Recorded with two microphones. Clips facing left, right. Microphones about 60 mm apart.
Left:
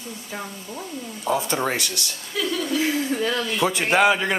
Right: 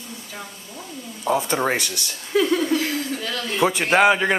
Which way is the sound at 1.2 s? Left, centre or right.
Centre.